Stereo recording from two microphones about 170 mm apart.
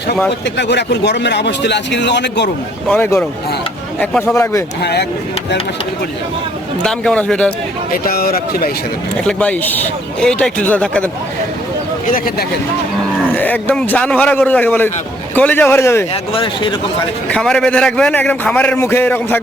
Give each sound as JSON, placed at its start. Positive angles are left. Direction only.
{"t": 0.5, "sound": "speech", "side_deg": 90}
{"t": 2.8, "sound": "a man's voice", "side_deg": 10}
{"t": 4.8, "sound": "speech", "side_deg": 75}
{"t": 6.8, "sound": "a man's voice", "side_deg": 5}
{"t": 8.0, "sound": "speech", "side_deg": 60}
{"t": 9.2, "sound": "a man's voice", "side_deg": 10}
{"t": 12.1, "sound": "speech", "side_deg": 60}
{"t": 13.3, "sound": "a man's voice", "side_deg": 10}
{"t": 16.3, "sound": "speech", "side_deg": 30}
{"t": 17.2, "sound": "a man's voice", "side_deg": 5}